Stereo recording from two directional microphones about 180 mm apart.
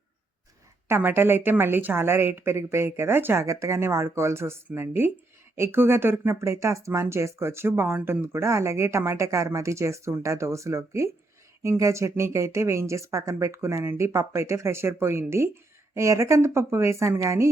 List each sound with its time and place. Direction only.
0.9 s speech: 15° right (ahead or behind)